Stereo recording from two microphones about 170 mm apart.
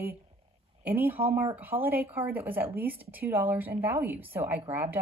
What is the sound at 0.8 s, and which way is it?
Speech, 10° right (ahead or behind).